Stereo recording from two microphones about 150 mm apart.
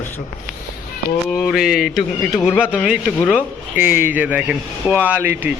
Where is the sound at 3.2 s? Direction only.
10° right (ahead or behind).